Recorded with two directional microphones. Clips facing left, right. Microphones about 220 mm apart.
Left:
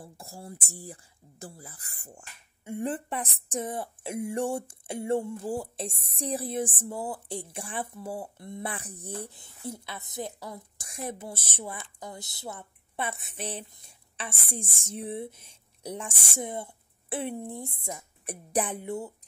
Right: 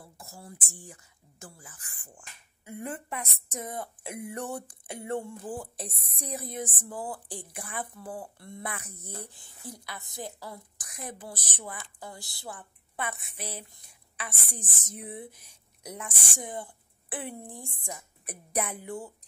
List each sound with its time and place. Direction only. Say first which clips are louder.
0.0 s speech: left 4 dB; 30° left (ahead or behind)
2.6 s speech: left 6 dB; 30° left (ahead or behind)
13.7 s a sound: left 1 dB; 25° left (ahead or behind)
14.9 s a woman's voice: left 6 dB; 25° left (ahead or behind)